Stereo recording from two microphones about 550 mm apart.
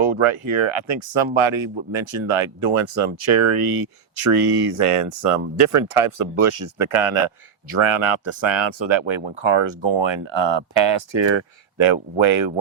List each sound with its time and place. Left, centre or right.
0.0 s speech: right